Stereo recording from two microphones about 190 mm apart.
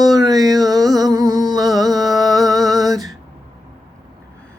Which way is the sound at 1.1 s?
20° right (ahead or behind).